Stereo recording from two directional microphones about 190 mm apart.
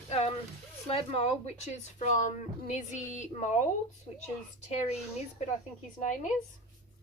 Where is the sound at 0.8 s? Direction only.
30° left (ahead or behind).